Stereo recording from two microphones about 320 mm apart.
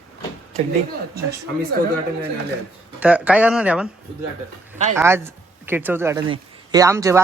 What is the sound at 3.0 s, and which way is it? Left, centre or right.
Speech, centre.